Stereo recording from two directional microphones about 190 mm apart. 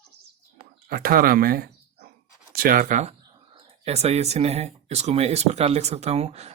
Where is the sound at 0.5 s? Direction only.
50° right (ahead or behind).